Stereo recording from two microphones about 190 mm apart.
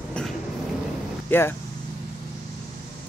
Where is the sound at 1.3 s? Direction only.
10° left (ahead or behind).